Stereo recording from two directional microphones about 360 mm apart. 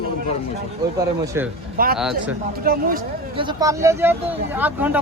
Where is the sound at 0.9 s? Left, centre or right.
Centre.